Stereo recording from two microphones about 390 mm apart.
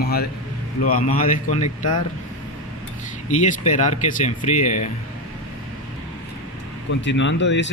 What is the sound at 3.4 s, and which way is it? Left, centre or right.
Speech, centre.